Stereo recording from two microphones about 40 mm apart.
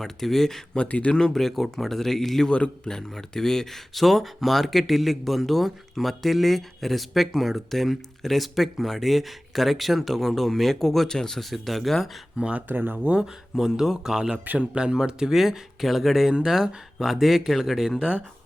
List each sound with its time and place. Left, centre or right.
0.0 s speech: centre
0.8 s speech: left
1.3 s speech: centre
3.9 s speech: centre
12.4 s speech: right
12.6 s speech: right
13.6 s speech: centre
14.3 s speech: right
14.8 s speech: right